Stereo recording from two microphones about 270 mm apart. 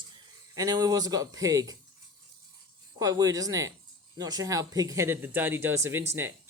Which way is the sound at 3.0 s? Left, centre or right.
Centre.